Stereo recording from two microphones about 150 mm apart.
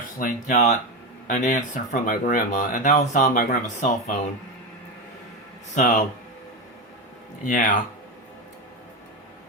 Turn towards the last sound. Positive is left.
turn(degrees=60)  # may be behind; listen again after turning